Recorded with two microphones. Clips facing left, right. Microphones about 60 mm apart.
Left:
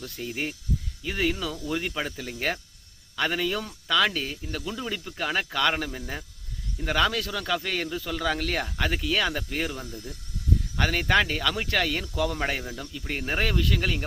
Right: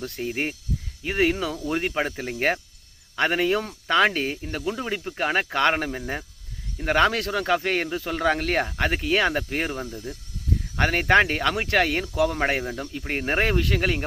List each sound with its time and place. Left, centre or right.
0.0 s speech: right
12.0 s speech: right